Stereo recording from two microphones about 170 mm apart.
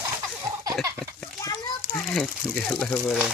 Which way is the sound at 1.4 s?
20° left (ahead or behind).